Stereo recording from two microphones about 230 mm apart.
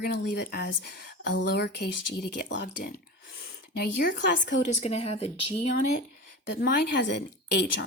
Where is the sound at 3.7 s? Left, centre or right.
Left.